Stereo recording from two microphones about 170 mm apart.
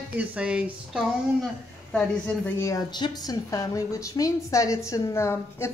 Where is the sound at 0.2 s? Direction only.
5° right (ahead or behind).